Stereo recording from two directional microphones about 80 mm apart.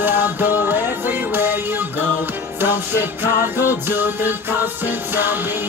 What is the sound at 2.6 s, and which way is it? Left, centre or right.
Music, right.